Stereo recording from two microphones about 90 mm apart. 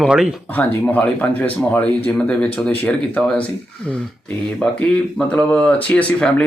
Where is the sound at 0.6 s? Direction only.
15° left (ahead or behind).